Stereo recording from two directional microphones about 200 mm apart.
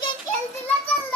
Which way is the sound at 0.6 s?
10° left (ahead or behind).